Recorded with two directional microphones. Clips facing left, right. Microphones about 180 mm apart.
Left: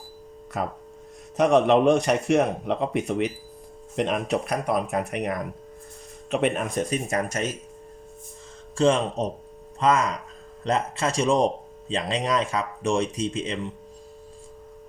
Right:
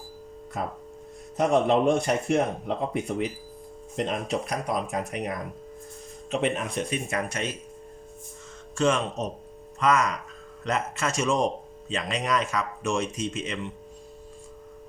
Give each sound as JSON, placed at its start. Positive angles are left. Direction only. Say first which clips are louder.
{"t": 0.6, "sound": "speech", "louder": "left 3 dB", "side_deg": 75}
{"t": 6.7, "sound": "speech", "louder": "left 3 dB", "side_deg": 40}
{"t": 8.8, "sound": "speech", "louder": "left 3 dB", "side_deg": 30}